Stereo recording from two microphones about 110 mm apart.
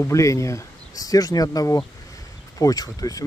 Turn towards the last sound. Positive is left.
turn(degrees=35)  # may be behind; listen again after turning